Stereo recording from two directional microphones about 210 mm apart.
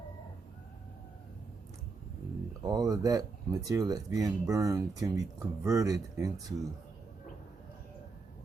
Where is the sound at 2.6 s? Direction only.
20° right (ahead or behind).